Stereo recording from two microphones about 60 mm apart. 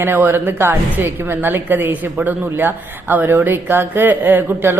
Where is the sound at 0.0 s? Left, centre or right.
Right.